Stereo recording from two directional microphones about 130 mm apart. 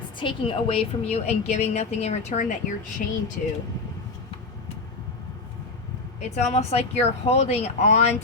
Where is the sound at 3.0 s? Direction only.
90° left.